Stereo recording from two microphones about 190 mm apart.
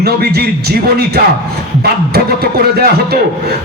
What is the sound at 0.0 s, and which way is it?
A man's voice, 55° right (ahead or behind).